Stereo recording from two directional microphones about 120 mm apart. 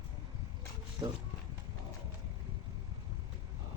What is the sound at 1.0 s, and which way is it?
Speech, 35° right (ahead or behind).